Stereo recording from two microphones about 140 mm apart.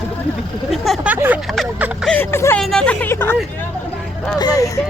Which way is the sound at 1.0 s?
15° right (ahead or behind).